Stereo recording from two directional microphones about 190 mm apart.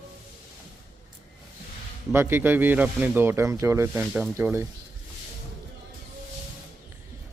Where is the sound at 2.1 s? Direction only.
10° right (ahead or behind).